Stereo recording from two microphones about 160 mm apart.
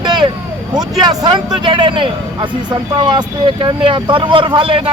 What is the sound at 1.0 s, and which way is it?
Speech, 25° right (ahead or behind).